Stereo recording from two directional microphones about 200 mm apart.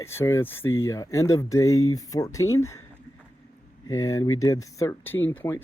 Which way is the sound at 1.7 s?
90° left.